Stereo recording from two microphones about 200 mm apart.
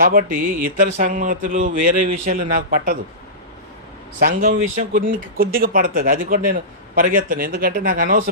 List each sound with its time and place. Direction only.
0.0 s speech: 45° right (ahead or behind)
4.2 s speech: 45° right (ahead or behind)